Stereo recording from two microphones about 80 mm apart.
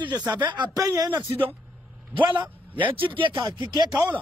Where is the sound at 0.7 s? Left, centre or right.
Right.